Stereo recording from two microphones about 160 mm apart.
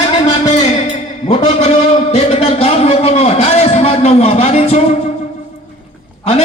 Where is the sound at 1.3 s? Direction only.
45° left (ahead or behind).